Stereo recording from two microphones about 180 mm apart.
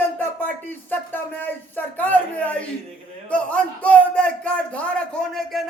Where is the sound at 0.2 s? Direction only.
10° left (ahead or behind).